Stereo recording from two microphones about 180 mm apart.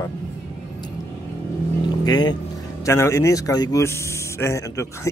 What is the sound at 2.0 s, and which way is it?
Speech, 20° left (ahead or behind).